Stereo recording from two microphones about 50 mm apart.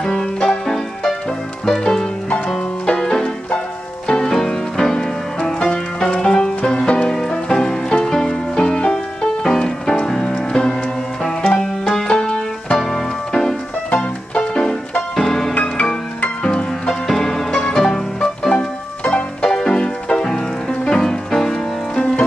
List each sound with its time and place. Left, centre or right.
0.0 s music: centre
2.2 s music: left
2.9 s banjo: centre
4.1 s music: centre
12.1 s music: centre